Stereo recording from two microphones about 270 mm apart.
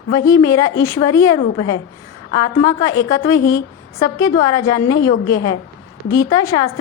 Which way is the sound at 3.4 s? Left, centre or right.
Left.